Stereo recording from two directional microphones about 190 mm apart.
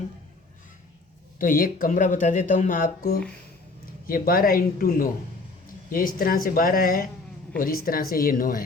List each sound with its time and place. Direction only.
1.4 s speech: 50° left (ahead or behind)